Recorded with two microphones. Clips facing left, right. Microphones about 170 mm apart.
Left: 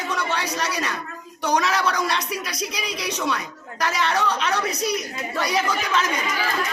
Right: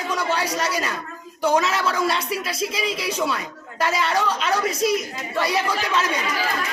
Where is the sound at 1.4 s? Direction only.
Centre (ahead or behind).